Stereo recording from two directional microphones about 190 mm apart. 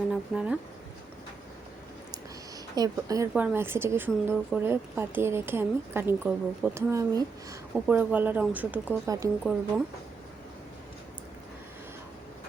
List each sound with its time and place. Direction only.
0.1 s speech: 5° right (ahead or behind)
2.7 s speech: 20° right (ahead or behind)
9.4 s speech: centre (ahead or behind)